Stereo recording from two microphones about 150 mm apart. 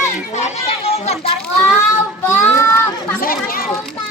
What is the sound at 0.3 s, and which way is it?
Children playing, 45° left (ahead or behind).